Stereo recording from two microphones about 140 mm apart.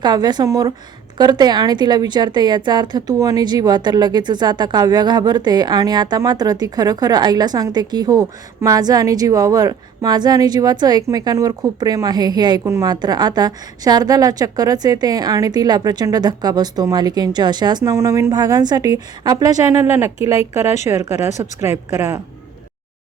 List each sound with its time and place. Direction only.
0.0 s a woman's voice: 30° right (ahead or behind)
20.7 s speech: 55° left (ahead or behind)